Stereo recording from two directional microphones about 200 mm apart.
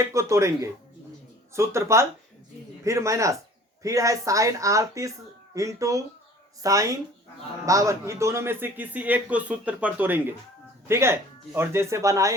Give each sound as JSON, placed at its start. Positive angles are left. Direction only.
{"t": 0.0, "sound": "a man's voice", "side_deg": -15}